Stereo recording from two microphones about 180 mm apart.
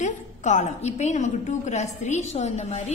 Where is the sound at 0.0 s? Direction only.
40° left (ahead or behind).